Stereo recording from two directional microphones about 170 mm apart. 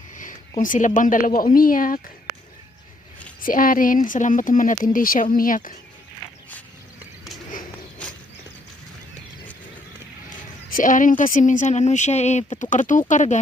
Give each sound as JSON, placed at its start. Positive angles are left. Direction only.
{"t": 0.2, "sound": "speech", "side_deg": 50}
{"t": 3.4, "sound": "speech", "side_deg": 55}
{"t": 10.7, "sound": "speech", "side_deg": 50}